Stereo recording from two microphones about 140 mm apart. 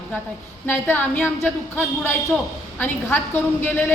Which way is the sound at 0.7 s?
15° left (ahead or behind).